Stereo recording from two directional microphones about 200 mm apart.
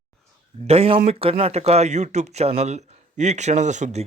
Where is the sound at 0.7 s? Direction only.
30° right (ahead or behind).